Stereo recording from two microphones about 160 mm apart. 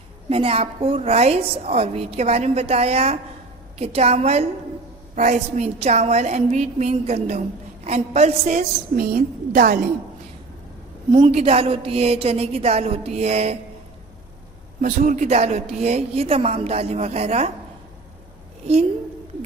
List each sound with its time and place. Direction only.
0.3 s a woman's voice: 35° right (ahead or behind)
9.0 s a woman's voice: 65° right (ahead or behind)
11.1 s a woman's voice: 30° right (ahead or behind)
14.8 s a woman's voice: 60° right (ahead or behind); by 17.5 s 40° right (ahead or behind)